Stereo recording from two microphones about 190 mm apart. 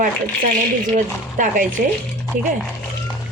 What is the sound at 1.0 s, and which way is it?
Speech, 45° right (ahead or behind).